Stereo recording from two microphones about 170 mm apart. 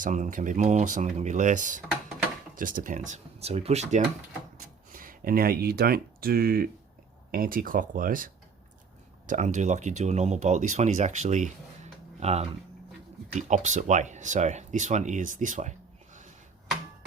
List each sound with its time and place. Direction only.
0.0 s speech: 50° right (ahead or behind)
4.5 s speech: 55° right (ahead or behind); by 12.5 s 40° right (ahead or behind)
13.5 s speech: 45° right (ahead or behind)